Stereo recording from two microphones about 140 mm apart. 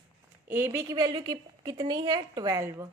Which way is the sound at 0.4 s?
15° right (ahead or behind).